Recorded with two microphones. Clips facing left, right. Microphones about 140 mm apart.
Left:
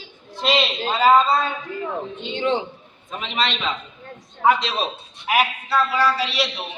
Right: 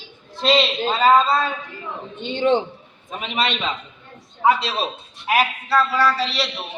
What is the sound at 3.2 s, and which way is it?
Speech, 45° right (ahead or behind).